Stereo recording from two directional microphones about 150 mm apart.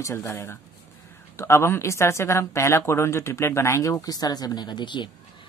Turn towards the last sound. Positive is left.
turn(degrees=30)  # may be behind; listen again after turning